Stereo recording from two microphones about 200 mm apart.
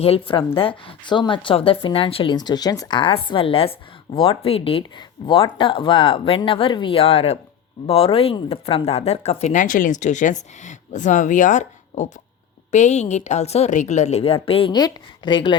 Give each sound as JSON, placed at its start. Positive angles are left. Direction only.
{"t": 0.0, "sound": "a woman's voice", "side_deg": 25}